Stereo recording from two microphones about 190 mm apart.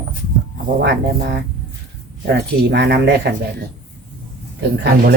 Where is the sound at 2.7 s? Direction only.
65° right (ahead or behind).